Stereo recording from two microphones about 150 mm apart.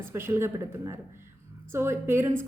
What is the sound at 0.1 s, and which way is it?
A woman's voice, 15° right (ahead or behind).